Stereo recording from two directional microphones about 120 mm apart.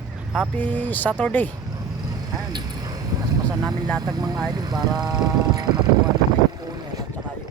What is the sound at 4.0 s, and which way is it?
Speech, 35° right (ahead or behind).